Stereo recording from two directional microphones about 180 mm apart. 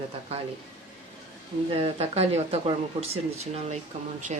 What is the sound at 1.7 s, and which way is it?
Speech, 35° right (ahead or behind).